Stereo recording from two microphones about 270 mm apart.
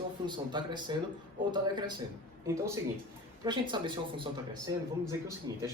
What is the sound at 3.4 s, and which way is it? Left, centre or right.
Speech, centre.